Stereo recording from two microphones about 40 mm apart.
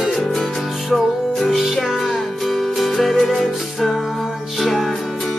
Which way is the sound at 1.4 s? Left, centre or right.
Centre.